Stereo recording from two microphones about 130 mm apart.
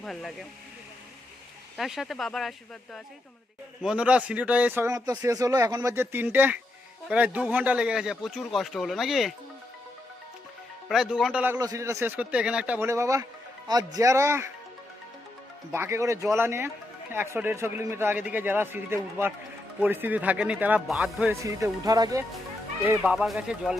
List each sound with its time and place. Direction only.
0.0 s speech: centre (ahead or behind)
1.7 s a man's voice: centre (ahead or behind)
10.8 s speech: 5° right (ahead or behind)
11.6 s a man's voice: 25° right (ahead or behind)
12.9 s speech: 25° right (ahead or behind)
15.7 s a man's voice: 20° right (ahead or behind)
21.3 s speech: 25° right (ahead or behind)
23.0 s speech: 5° right (ahead or behind)